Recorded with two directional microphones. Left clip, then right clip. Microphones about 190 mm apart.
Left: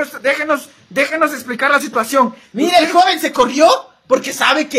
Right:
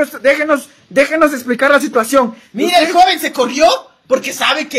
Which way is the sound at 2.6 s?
20° left (ahead or behind).